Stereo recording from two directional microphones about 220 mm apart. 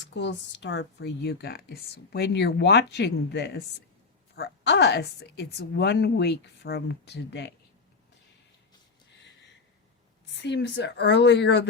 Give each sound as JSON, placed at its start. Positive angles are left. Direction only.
{"t": 0.0, "sound": "speech", "side_deg": 55}
{"t": 10.4, "sound": "speech", "side_deg": 50}